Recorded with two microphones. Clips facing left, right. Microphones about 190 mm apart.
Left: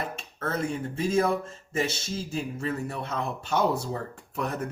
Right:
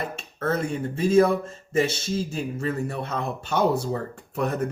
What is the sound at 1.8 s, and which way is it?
Speech, 55° right (ahead or behind).